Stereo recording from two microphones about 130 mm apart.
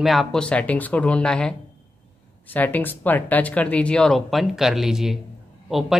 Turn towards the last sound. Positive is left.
turn(degrees=0)  # may be behind; listen again after turning